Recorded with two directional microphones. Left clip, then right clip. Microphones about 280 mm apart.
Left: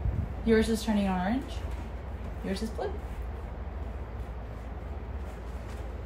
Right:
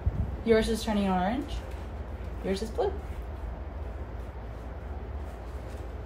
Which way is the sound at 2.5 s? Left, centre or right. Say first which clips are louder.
Right 5 dB; right.